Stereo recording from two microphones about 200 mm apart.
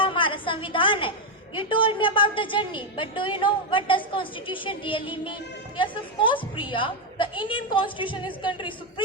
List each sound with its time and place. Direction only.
0.0 s music: 25° left (ahead or behind)
1.5 s a woman's voice: 25° left (ahead or behind)